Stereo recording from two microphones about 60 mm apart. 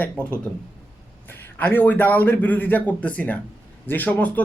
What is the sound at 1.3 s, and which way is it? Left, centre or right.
A man's voice, left.